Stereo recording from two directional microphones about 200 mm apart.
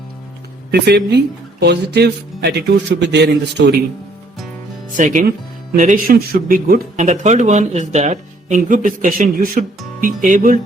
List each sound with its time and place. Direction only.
0.7 s speech: 55° right (ahead or behind)
4.9 s speech: 40° right (ahead or behind)